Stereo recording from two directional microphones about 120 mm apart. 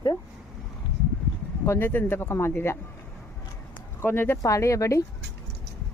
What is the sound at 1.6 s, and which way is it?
A woman's voice, 20° left (ahead or behind).